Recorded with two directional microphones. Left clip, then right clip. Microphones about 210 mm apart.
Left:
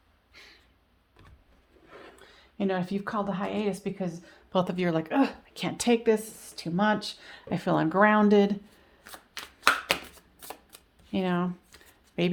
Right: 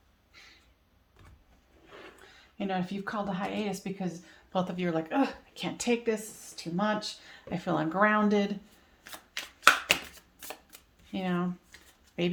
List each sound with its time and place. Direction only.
0.3 s a sound: 45° left (ahead or behind)
2.6 s speech: 45° left (ahead or behind)
4.5 s speech: 50° left (ahead or behind)
11.1 s speech: 45° left (ahead or behind)